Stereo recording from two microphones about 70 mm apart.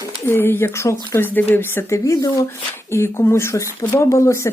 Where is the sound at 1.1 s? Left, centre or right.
Left.